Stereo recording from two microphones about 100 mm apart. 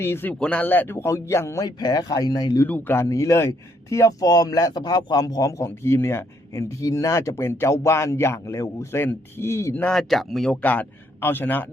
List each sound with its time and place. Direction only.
0.0 s speech: 20° left (ahead or behind)
0.3 s speech: 10° left (ahead or behind); by 2.6 s 40° left (ahead or behind)
2.6 s speech: 20° left (ahead or behind); by 5.6 s 35° left (ahead or behind)
5.6 s speech: 25° left (ahead or behind)
9.8 s a man's voice: 5° left (ahead or behind); by 11.6 s 20° left (ahead or behind)